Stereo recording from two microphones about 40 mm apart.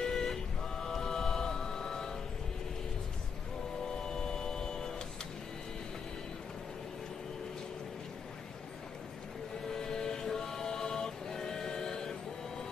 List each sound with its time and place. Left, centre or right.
0.0 s vehicle: centre
0.8 s music: centre
4.0 s vehicle: centre
9.7 s music: centre